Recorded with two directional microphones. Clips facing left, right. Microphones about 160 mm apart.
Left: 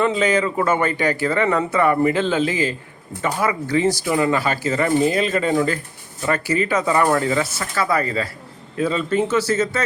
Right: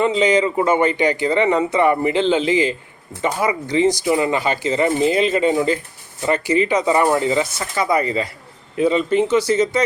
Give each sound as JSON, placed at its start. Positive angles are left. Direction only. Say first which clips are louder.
{"t": 0.0, "sound": "speech", "louder": "right 2 dB", "side_deg": -15}